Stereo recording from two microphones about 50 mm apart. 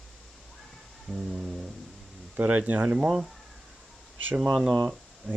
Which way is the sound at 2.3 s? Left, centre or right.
Right.